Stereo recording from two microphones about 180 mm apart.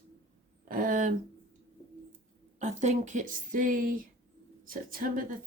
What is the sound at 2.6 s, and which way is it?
A woman's voice, 40° right (ahead or behind).